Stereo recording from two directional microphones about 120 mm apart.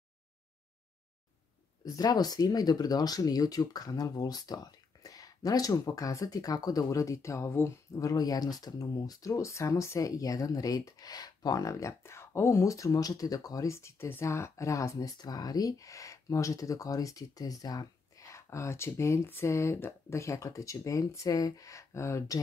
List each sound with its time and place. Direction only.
1.9 s speech: 30° left (ahead or behind)